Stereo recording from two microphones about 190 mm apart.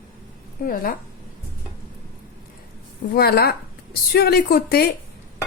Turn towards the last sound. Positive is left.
turn(degrees=55)  # may be behind; listen again after turning